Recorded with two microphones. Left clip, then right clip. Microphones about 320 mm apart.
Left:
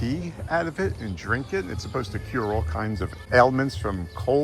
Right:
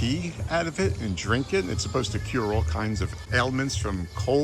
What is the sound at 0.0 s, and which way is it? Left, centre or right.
Speech, centre.